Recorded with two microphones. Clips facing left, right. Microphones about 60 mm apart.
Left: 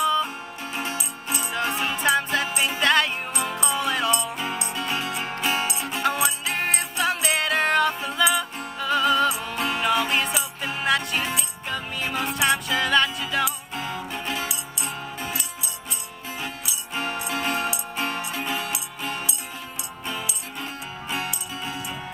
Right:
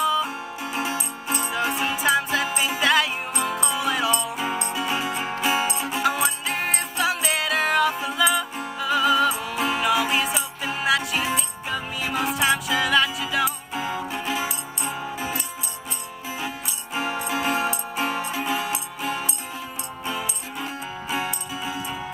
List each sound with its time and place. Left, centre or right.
0.0 s music: centre
0.9 s music: right
1.5 s music: centre
16.9 s music: centre
20.6 s music: centre